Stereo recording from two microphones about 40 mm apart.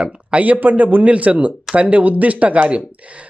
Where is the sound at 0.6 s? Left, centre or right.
Right.